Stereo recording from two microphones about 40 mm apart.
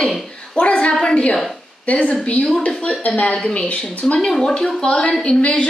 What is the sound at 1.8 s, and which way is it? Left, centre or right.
A woman's voice, left.